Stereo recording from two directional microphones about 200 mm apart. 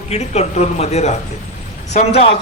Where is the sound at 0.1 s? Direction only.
35° left (ahead or behind).